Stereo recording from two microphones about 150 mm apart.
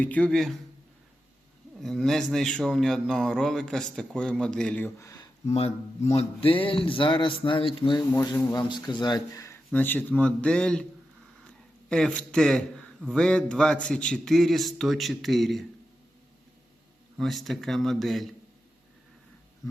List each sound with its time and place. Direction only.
0.0 s a man's voice: 10° left (ahead or behind)
1.8 s a man's voice: 5° left (ahead or behind)
4.9 s speech: 20° left (ahead or behind)
5.5 s a man's voice: 45° left (ahead or behind); by 15.6 s centre (ahead or behind)
17.2 s a man's voice: centre (ahead or behind)